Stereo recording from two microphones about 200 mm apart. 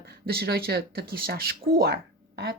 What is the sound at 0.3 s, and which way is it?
Speech, 50° right (ahead or behind).